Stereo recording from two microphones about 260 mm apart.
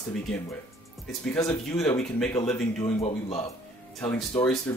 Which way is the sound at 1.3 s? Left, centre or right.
Centre.